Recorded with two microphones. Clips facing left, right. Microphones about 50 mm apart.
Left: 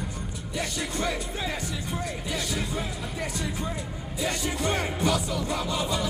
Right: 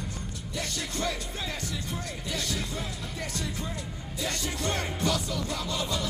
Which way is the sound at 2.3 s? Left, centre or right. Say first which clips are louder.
Left 2 dB; centre.